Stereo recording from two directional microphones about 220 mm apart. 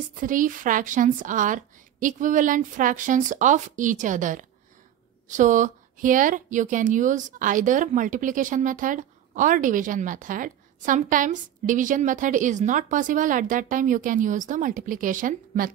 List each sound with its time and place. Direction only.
0.1 s a woman's voice: 35° right (ahead or behind)